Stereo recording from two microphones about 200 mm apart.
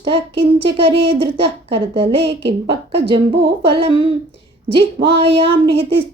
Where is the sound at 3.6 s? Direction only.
25° right (ahead or behind).